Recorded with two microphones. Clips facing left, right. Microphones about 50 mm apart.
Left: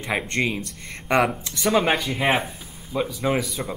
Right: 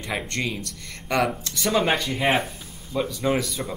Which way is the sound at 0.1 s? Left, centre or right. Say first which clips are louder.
Left 4 dB; centre.